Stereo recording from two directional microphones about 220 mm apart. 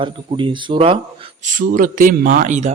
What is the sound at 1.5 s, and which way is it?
A man's voice, 35° right (ahead or behind).